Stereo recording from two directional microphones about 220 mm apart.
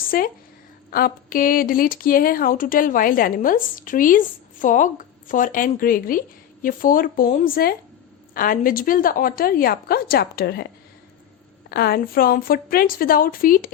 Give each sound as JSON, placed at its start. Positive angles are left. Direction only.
{"t": 0.1, "sound": "speech", "side_deg": 40}
{"t": 11.7, "sound": "speech", "side_deg": 45}